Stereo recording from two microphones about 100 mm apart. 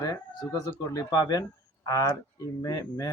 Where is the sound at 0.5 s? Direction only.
35° left (ahead or behind).